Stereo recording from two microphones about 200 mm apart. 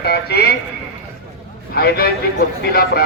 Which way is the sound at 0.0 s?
55° left (ahead or behind).